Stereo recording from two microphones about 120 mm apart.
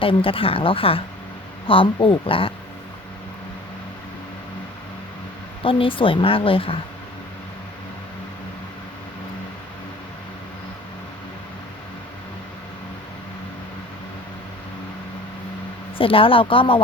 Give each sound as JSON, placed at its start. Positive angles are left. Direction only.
{"t": 0.0, "sound": "speech", "side_deg": 50}
{"t": 5.6, "sound": "speech", "side_deg": 45}
{"t": 16.0, "sound": "speech", "side_deg": 50}